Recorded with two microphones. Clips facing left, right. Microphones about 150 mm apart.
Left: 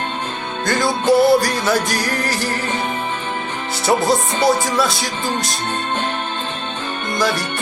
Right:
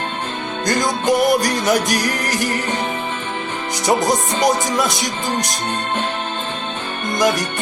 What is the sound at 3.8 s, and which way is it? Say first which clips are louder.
Music: left 1 dB; 15° right (ahead or behind).